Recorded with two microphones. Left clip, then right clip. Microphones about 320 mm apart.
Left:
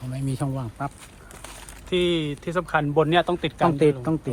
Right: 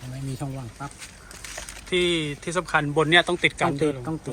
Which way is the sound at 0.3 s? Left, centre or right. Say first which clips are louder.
Left 5 dB; left.